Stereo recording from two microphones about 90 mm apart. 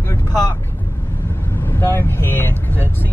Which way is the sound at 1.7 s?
25° left (ahead or behind).